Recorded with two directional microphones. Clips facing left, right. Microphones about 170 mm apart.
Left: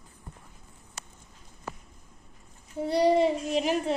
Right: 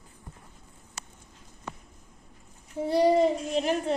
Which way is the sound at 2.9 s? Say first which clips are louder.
Right 1 dB; 5° right (ahead or behind).